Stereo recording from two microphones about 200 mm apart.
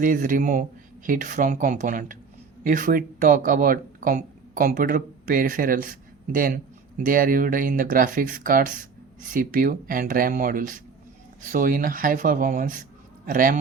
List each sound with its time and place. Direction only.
0.0 s speech: 40° right (ahead or behind)